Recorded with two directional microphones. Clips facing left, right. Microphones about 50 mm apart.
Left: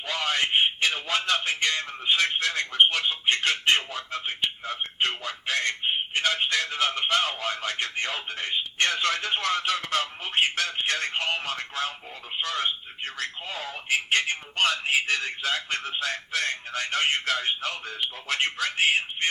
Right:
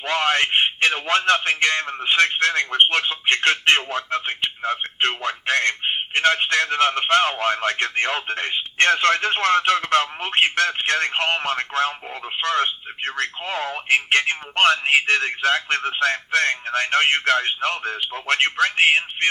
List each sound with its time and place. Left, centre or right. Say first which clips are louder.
0.0 s a man's voice: right 7 dB; right